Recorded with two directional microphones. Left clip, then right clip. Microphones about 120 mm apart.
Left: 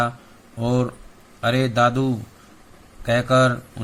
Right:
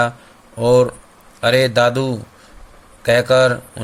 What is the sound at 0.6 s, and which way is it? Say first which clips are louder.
Speech: right 11 dB; 40° right (ahead or behind).